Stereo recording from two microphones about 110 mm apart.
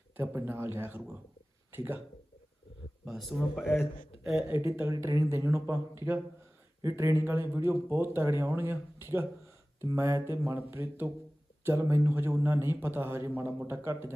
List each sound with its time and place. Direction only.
0.2 s a man's voice: 20° right (ahead or behind)
3.1 s speech: centre (ahead or behind)
4.4 s a man's voice: 25° right (ahead or behind)